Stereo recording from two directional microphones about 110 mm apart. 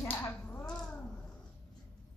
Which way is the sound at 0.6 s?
5° left (ahead or behind).